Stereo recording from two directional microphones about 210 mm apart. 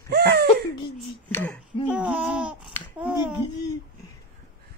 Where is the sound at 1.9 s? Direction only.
5° right (ahead or behind).